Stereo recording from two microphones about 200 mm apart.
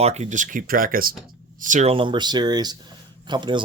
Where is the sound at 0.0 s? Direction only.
35° right (ahead or behind).